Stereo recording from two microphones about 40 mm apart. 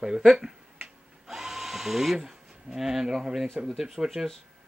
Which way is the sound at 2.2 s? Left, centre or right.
Centre.